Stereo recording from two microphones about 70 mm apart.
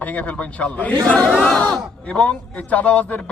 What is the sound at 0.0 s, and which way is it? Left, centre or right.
A man's voice, left.